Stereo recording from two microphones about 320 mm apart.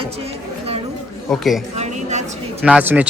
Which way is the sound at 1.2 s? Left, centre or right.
Centre.